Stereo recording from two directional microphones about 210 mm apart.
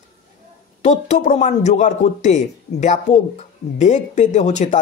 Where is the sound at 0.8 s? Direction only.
35° left (ahead or behind).